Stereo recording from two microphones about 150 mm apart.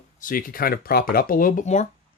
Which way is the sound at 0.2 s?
65° left (ahead or behind).